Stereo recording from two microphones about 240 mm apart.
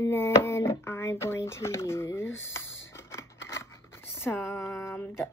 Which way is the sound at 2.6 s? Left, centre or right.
Left.